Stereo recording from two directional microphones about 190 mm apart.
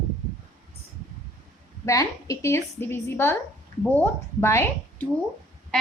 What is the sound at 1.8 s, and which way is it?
A woman's voice, 15° left (ahead or behind).